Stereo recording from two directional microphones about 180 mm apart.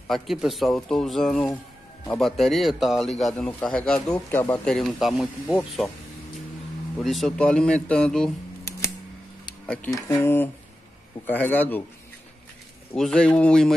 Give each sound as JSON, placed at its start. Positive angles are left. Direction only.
{"t": 0.1, "sound": "a man's voice", "side_deg": 0}
{"t": 7.0, "sound": "a man's voice", "side_deg": 0}
{"t": 9.7, "sound": "speech", "side_deg": 5}
{"t": 12.9, "sound": "a man's voice", "side_deg": 5}